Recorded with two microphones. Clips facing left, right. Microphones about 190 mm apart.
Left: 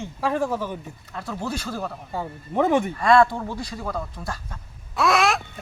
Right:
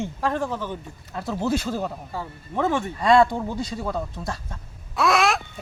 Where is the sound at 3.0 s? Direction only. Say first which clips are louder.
Right 2 dB; 15° right (ahead or behind).